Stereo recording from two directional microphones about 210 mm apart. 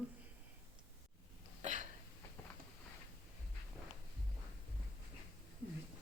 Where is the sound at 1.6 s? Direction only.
35° right (ahead or behind).